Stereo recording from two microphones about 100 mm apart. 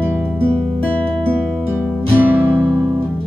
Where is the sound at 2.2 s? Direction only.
20° right (ahead or behind).